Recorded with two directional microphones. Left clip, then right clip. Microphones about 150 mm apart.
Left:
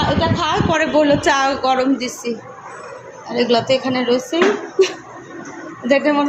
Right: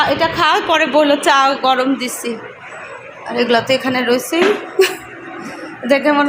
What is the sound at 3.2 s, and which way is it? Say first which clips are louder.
A woman's voice: right 2 dB; 5° right (ahead or behind).